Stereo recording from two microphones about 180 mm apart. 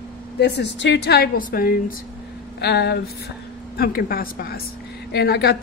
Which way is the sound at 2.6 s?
65° left (ahead or behind).